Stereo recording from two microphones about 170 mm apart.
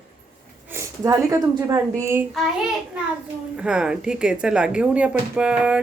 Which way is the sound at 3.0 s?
5° right (ahead or behind).